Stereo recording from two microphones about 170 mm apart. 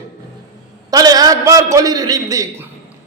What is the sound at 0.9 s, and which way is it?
A man's voice, 20° right (ahead or behind).